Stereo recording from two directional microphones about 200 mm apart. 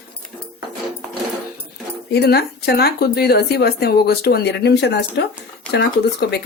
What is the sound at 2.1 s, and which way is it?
Speech, 50° left (ahead or behind).